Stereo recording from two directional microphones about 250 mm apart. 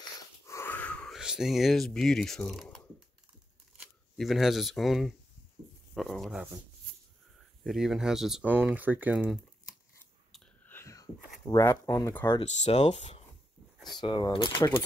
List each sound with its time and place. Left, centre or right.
0.5 s a sound: centre
3.8 s speech: centre
7.6 s speech: centre
10.3 s whispering: centre
11.4 s speech: centre
12.4 s speech: left